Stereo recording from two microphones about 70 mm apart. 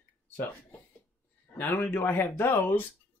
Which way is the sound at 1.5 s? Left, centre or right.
Left.